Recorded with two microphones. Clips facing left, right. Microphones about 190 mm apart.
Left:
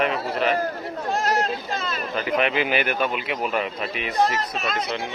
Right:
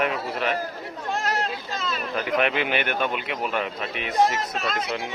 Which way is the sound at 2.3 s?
Centre (ahead or behind).